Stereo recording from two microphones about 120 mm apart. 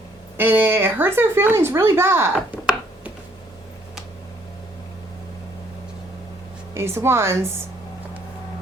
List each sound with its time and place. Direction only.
0.3 s speech: 15° right (ahead or behind)
6.7 s speech: 20° right (ahead or behind)